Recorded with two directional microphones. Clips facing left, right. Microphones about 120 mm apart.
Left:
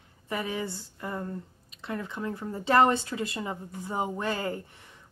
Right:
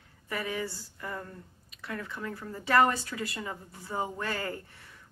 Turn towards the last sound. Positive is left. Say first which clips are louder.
# left 4 dB
turn(degrees=20)  # may be behind; listen again after turning